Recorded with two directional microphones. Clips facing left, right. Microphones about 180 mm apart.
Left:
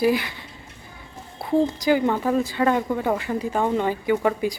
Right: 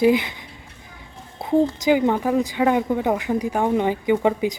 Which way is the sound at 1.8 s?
15° right (ahead or behind).